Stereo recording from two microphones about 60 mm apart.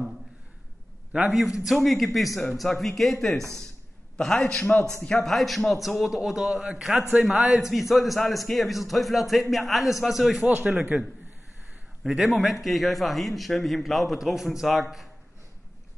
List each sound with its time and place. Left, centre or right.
1.3 s a man's voice: centre
10.4 s a man's voice: right
12.0 s a man's voice: centre